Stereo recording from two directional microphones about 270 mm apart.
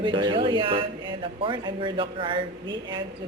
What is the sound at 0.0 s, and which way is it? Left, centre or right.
A woman's voice, centre.